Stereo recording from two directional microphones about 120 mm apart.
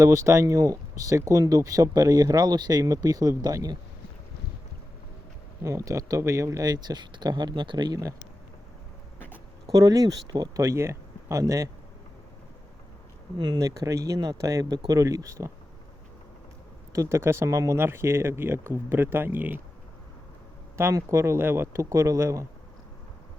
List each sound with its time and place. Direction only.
0.0 s speech: 25° right (ahead or behind)
5.6 s speech: 25° right (ahead or behind)
9.7 s speech: 30° right (ahead or behind)
13.6 s speech: 25° right (ahead or behind)
16.9 s speech: 25° right (ahead or behind)
20.7 s speech: 25° right (ahead or behind)